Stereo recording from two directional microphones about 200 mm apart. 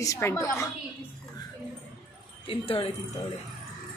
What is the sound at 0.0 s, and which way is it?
Speech, 15° left (ahead or behind).